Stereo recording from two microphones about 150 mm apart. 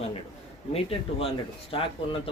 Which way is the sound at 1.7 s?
35° left (ahead or behind).